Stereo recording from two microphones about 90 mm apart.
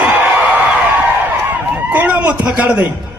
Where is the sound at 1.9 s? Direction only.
20° right (ahead or behind).